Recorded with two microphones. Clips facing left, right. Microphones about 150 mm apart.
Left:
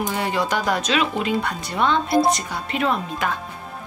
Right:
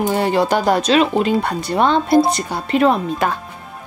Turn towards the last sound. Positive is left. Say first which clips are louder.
# right 7 dB
turn(degrees=-40)  # may be behind; listen again after turning